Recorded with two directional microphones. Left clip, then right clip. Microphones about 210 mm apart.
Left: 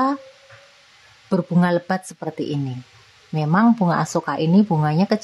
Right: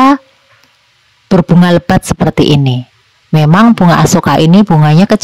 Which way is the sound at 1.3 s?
45° right (ahead or behind).